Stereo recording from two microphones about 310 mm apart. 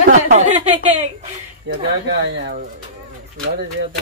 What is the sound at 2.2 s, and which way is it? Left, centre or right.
Speech, right.